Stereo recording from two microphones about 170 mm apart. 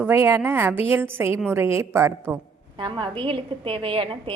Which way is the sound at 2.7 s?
30° right (ahead or behind).